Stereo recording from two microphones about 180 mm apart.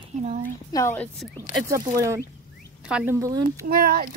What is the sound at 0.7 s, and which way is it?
Speech, 15° left (ahead or behind).